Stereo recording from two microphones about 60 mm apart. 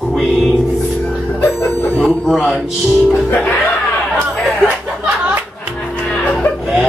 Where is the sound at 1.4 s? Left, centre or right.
Left.